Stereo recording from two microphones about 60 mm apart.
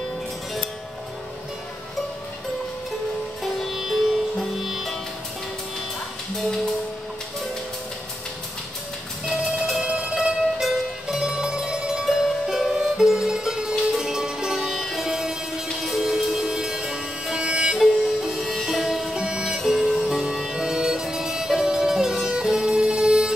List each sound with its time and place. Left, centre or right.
3.4 s music: centre
6.3 s music: centre
9.2 s telephone bell ringing: centre
9.8 s cowbell: centre
10.6 s music: centre
17.7 s music: centre
19.1 s music: centre
19.5 s music: centre